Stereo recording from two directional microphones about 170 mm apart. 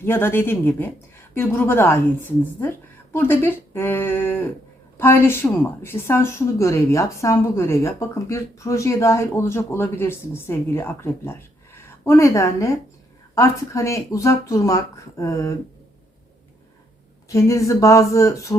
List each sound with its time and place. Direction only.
0.0 s a woman's voice: 15° left (ahead or behind)
17.2 s a woman's voice: 20° left (ahead or behind)